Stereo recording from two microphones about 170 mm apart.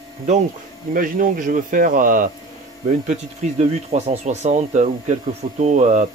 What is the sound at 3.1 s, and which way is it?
Speech, 40° right (ahead or behind).